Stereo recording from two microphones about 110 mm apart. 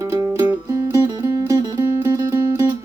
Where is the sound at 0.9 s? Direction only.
30° right (ahead or behind).